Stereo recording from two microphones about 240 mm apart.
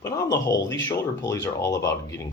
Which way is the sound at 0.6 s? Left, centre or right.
Left.